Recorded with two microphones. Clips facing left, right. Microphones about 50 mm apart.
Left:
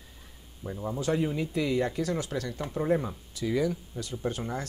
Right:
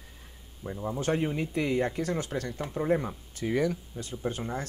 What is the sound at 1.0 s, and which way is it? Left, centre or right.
Speech, right.